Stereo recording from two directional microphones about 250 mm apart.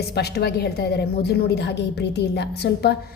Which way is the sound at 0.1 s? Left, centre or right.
Left.